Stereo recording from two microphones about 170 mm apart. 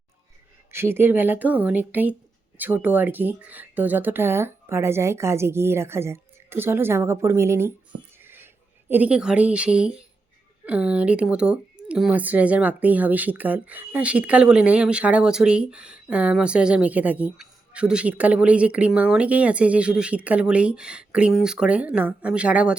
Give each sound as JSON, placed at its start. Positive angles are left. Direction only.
{"t": 0.7, "sound": "speech", "side_deg": -15}
{"t": 8.2, "sound": "a sound", "side_deg": -10}
{"t": 8.9, "sound": "speech", "side_deg": -10}